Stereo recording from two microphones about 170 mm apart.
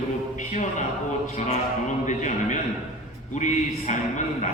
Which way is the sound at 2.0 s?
45° left (ahead or behind).